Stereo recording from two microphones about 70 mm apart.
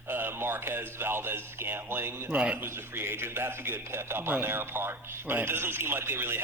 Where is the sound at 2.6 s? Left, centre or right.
Right.